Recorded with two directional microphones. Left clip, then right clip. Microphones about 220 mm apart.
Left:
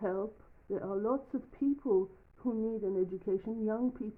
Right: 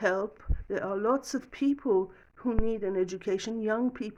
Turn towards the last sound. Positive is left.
turn(degrees=-30)  # may be behind; listen again after turning